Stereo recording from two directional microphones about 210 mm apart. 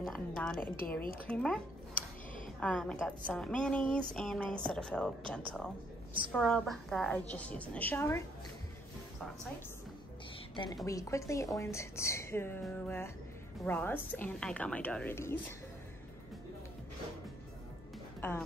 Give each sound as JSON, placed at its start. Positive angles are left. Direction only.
{"t": 0.0, "sound": "a woman's voice", "side_deg": 5}
{"t": 2.6, "sound": "a woman's voice", "side_deg": 5}
{"t": 10.5, "sound": "a woman's voice", "side_deg": 25}
{"t": 18.2, "sound": "speech", "side_deg": 10}